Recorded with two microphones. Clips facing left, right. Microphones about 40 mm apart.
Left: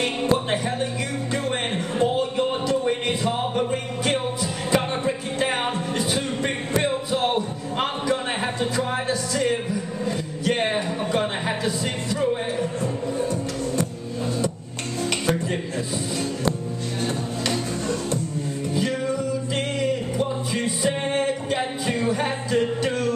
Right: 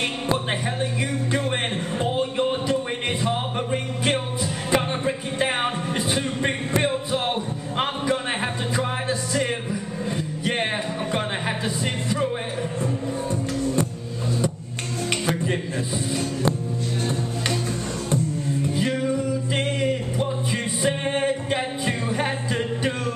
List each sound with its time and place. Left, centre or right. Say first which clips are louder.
2.9 s music: left 1 dB; centre
5.0 s a sound: even; centre
9.3 s music: left 2 dB; centre
11.8 s speech: even; centre
12.8 s music: left 1 dB; centre
15.0 s music: even; centre
18.8 s music: left 1 dB; centre